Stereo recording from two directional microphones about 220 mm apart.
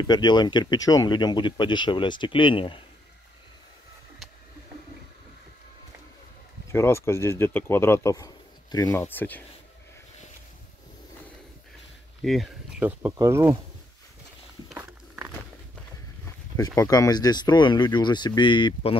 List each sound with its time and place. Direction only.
0.1 s speech: 20° left (ahead or behind)
6.7 s speech: 10° left (ahead or behind)
12.2 s speech: centre (ahead or behind)
14.7 s walk: centre (ahead or behind)
16.3 s speech: 15° left (ahead or behind)